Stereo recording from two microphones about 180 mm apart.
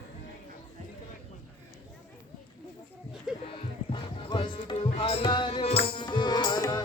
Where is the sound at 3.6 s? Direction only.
30° left (ahead or behind).